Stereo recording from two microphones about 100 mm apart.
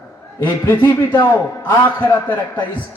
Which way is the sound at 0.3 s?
20° left (ahead or behind).